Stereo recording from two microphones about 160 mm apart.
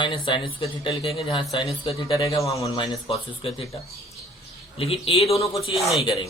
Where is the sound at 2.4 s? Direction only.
20° left (ahead or behind).